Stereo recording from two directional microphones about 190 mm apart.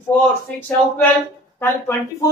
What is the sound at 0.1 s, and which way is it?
Speech, 10° left (ahead or behind).